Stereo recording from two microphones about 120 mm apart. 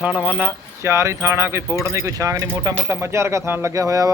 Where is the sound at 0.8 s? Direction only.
25° right (ahead or behind).